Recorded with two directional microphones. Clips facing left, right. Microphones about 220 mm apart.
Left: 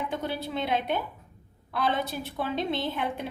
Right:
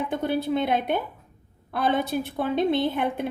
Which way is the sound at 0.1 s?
55° right (ahead or behind).